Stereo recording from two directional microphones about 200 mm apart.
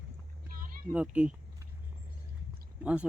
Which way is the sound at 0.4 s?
45° right (ahead or behind).